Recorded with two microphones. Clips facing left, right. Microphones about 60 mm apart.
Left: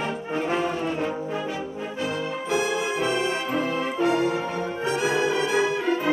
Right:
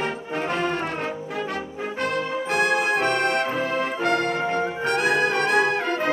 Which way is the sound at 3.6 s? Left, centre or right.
Right.